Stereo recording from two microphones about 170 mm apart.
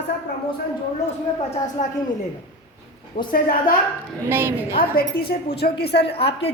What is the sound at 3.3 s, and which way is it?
Speech, 55° left (ahead or behind).